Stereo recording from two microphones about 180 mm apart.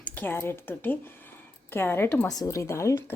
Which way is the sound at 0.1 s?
10° left (ahead or behind).